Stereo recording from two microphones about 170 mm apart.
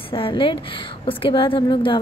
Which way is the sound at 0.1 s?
30° left (ahead or behind).